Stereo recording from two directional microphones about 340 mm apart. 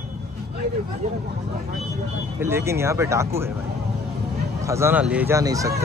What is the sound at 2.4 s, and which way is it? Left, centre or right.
Speech, centre.